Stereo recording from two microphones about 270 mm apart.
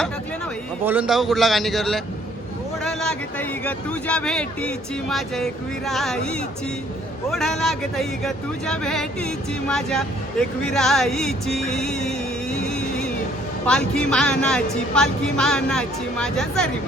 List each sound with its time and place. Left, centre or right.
0.9 s speech: centre
10.6 s music: centre
13.7 s speech: centre